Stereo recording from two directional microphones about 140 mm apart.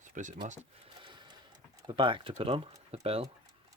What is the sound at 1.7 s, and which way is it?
Speech, 35° right (ahead or behind).